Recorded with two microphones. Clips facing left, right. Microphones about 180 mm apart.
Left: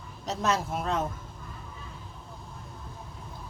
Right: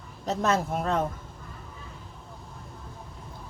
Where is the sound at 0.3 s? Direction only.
55° right (ahead or behind).